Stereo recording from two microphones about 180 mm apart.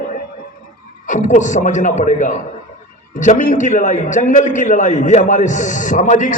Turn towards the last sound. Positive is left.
turn(degrees=45)  # may be behind; listen again after turning